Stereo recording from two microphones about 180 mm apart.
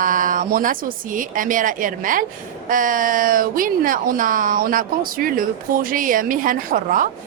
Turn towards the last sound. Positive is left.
turn(degrees=-50)  # may be behind; listen again after turning